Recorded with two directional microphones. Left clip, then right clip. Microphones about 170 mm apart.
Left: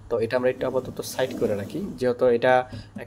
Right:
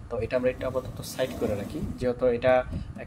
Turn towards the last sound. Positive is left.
turn(degrees=40)  # may be behind; listen again after turning